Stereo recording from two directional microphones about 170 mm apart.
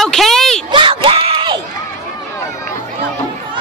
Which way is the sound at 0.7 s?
30° right (ahead or behind).